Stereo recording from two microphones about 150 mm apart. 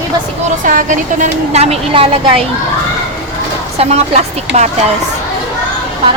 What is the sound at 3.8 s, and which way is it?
Speech, 50° right (ahead or behind).